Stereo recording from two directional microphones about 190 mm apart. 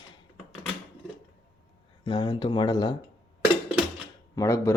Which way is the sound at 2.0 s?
25° left (ahead or behind).